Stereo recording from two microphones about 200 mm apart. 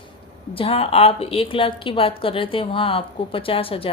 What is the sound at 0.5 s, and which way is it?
A woman's voice, 30° left (ahead or behind).